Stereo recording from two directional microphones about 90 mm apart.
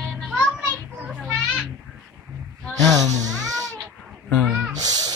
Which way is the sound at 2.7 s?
40° right (ahead or behind).